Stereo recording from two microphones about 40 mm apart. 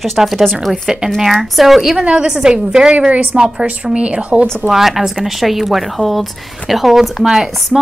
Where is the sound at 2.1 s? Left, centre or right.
Centre.